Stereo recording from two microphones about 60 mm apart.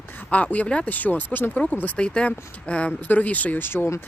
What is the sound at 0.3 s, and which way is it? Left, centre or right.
Speech, left.